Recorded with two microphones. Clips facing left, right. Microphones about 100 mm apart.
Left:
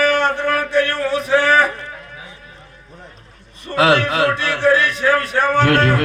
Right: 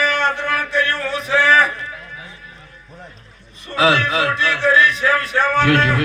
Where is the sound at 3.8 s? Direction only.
55° left (ahead or behind).